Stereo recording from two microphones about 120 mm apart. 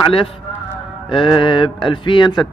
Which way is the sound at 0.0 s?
50° left (ahead or behind).